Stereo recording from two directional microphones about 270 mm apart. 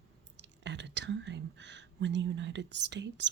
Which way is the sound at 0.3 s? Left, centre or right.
Right.